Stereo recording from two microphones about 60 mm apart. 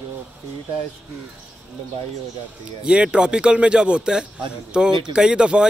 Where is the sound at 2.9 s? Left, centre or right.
Centre.